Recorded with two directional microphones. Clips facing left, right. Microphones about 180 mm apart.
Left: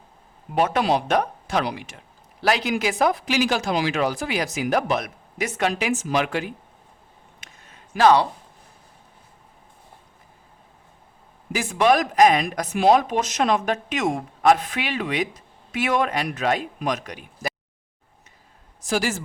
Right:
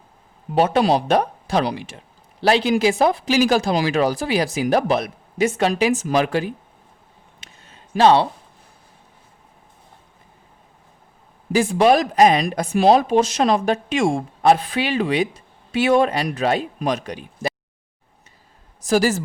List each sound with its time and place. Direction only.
0.5 s speech: 30° right (ahead or behind)
7.4 s a sound: 30° right (ahead or behind)
11.5 s speech: 30° right (ahead or behind)
18.9 s speech: 40° right (ahead or behind)